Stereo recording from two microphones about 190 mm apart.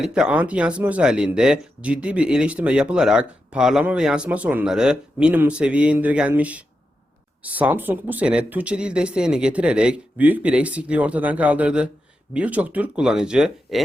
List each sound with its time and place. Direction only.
0.0 s speech: 5° right (ahead or behind)